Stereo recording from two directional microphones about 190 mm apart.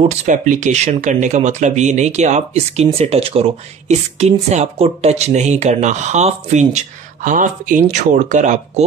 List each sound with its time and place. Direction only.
0.0 s speech: 35° right (ahead or behind)